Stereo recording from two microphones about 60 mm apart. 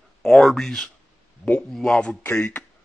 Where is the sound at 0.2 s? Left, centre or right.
Centre.